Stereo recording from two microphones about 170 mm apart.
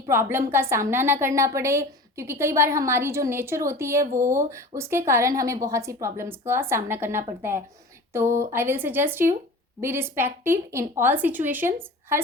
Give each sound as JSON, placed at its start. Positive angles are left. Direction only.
{"t": 0.1, "sound": "a woman's voice", "side_deg": -15}